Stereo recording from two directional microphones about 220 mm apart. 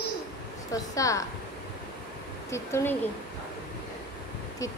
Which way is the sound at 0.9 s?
15° left (ahead or behind).